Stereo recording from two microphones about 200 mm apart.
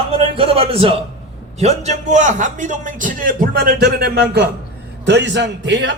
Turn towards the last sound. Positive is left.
turn(degrees=-60)  # may be behind; listen again after turning